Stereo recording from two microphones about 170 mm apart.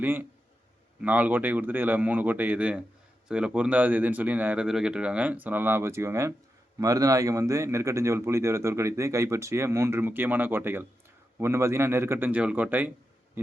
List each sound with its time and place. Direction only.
0.0 s speech: 10° right (ahead or behind)